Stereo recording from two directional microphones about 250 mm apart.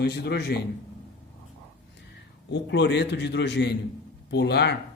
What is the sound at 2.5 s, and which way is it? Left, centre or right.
A man's voice, left.